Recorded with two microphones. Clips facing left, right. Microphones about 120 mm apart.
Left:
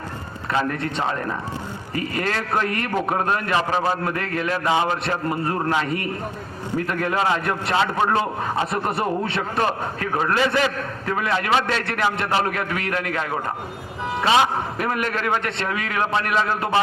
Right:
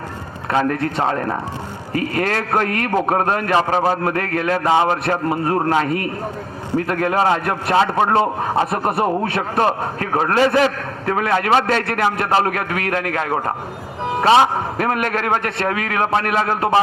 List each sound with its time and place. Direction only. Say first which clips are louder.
0.5 s a man's voice: right 5 dB; 55° right (ahead or behind)
4.1 s a man's voice: right 5 dB; 50° right (ahead or behind); by 10.7 s 35° right (ahead or behind)
11.0 s a man's voice: right 5 dB; 55° right (ahead or behind)
12.5 s a man's voice: right 4 dB; 55° right (ahead or behind)
14.3 s a man's voice: right 5 dB; 30° right (ahead or behind)
14.8 s a man's voice: right 5 dB; 50° right (ahead or behind)